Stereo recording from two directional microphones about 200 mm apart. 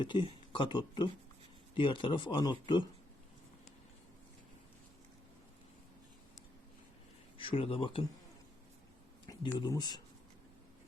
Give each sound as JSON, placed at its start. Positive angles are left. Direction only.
{"t": 0.0, "sound": "speech", "side_deg": 25}
{"t": 7.3, "sound": "speech", "side_deg": 25}
{"t": 9.2, "sound": "speech", "side_deg": 25}